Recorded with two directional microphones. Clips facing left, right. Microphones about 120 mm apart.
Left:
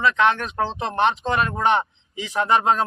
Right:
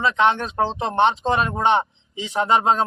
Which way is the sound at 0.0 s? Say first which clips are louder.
Right 1 dB; 20° right (ahead or behind).